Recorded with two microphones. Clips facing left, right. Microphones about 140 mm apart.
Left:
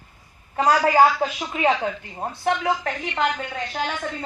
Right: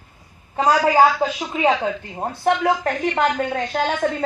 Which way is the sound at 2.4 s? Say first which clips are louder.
Right 4 dB; 40° right (ahead or behind).